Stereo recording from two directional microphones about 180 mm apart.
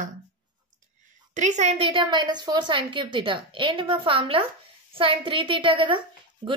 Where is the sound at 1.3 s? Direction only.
40° right (ahead or behind).